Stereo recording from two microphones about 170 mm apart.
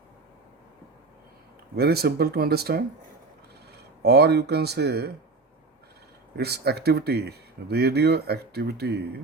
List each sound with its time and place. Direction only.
1.7 s speech: 70° right (ahead or behind)
4.0 s speech: 75° right (ahead or behind)
6.3 s speech: 70° right (ahead or behind)